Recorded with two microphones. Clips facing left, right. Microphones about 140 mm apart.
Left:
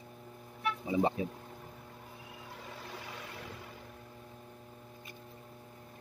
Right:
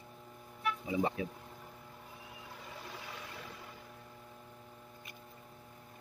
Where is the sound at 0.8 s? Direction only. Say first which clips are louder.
Left 4 dB; 30° left (ahead or behind).